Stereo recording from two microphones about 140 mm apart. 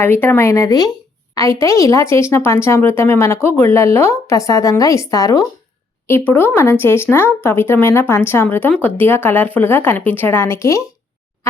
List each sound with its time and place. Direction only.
0.0 s a woman's voice: 15° left (ahead or behind)